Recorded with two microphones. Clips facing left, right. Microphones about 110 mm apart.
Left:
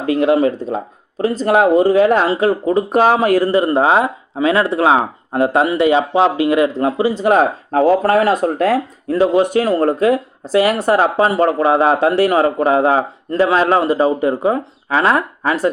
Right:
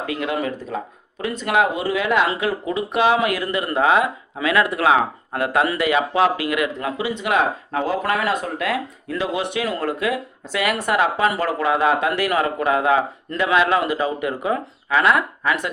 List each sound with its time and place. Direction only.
0.0 s speech: 35° left (ahead or behind)